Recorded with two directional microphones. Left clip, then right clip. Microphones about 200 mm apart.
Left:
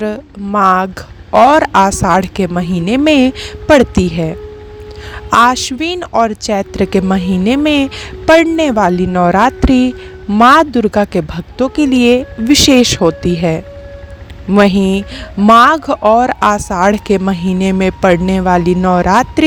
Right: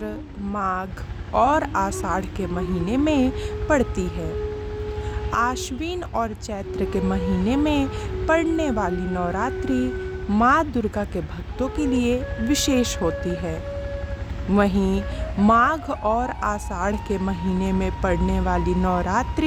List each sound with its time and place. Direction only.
0.0 s a woman's voice: 40° left (ahead or behind)
5.3 s a woman's voice: 40° left (ahead or behind)